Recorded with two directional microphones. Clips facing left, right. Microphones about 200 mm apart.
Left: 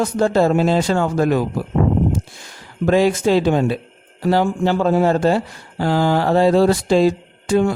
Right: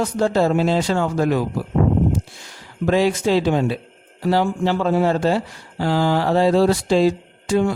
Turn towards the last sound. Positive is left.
turn(degrees=50)  # may be behind; listen again after turning